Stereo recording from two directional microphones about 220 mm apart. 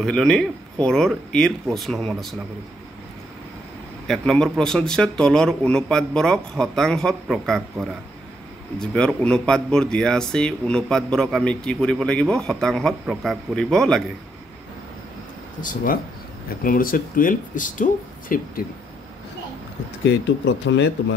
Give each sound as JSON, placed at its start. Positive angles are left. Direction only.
{"t": 0.0, "sound": "speech", "side_deg": 0}
{"t": 4.1, "sound": "speech", "side_deg": 5}
{"t": 15.6, "sound": "speech", "side_deg": 40}
{"t": 20.6, "sound": "speech", "side_deg": 55}